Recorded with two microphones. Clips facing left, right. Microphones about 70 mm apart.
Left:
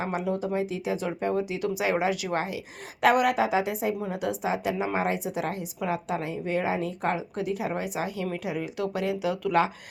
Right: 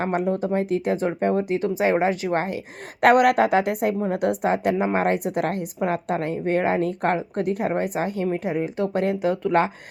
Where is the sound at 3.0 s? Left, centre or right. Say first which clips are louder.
Right 6 dB; right.